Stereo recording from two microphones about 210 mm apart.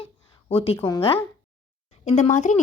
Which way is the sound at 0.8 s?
15° left (ahead or behind).